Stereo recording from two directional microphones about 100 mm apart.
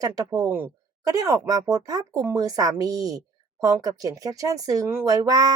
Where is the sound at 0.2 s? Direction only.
35° right (ahead or behind).